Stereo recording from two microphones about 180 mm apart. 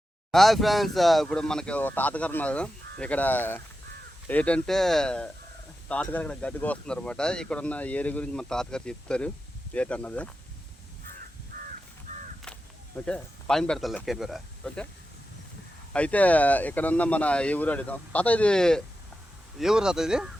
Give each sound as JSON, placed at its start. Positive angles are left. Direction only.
{"t": 0.3, "sound": "speech", "side_deg": 0}
{"t": 11.5, "sound": "crow", "side_deg": -45}
{"t": 13.1, "sound": "speech", "side_deg": 5}
{"t": 15.9, "sound": "speech", "side_deg": 5}